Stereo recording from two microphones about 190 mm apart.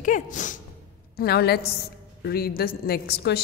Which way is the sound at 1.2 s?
55° left (ahead or behind).